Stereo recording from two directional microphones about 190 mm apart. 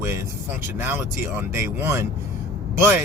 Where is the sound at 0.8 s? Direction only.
10° right (ahead or behind).